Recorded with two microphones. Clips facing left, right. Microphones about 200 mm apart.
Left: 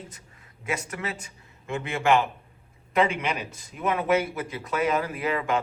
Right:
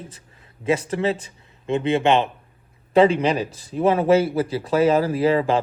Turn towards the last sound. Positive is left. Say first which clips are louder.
# right 8 dB
turn(degrees=-30)  # may be behind; listen again after turning